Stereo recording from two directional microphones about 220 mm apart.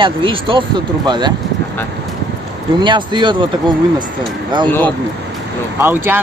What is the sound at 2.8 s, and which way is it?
Speech, 20° right (ahead or behind).